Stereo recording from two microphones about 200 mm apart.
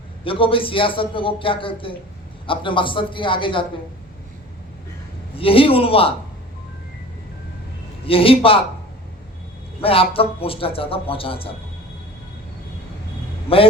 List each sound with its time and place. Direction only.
0.3 s a man's voice: 25° left (ahead or behind)
5.4 s a man's voice: 25° left (ahead or behind)
8.0 s a man's voice: 25° left (ahead or behind)
9.8 s a man's voice: 30° left (ahead or behind)
13.5 s a man's voice: 30° left (ahead or behind)